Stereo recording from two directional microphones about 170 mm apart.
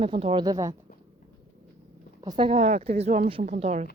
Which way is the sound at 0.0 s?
30° right (ahead or behind).